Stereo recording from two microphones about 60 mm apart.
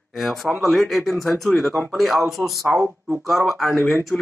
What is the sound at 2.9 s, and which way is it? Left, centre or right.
Speech, right.